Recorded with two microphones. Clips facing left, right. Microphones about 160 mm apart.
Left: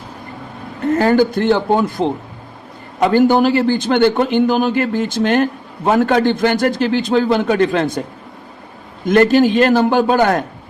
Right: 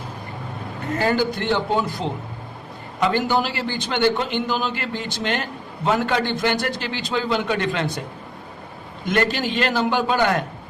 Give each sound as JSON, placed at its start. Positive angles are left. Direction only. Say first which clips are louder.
{"t": 0.9, "sound": "a man's voice", "louder": "left 7 dB", "side_deg": 50}
{"t": 9.0, "sound": "a man's voice", "louder": "left 11 dB", "side_deg": 45}